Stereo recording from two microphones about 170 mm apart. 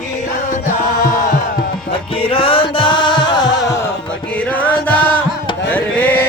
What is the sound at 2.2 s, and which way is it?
Music, 30° left (ahead or behind).